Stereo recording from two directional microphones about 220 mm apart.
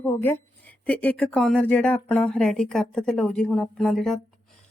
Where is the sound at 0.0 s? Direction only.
10° left (ahead or behind).